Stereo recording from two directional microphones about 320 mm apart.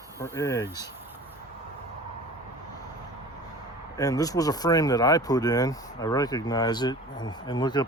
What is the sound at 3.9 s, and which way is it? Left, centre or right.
Speech, centre.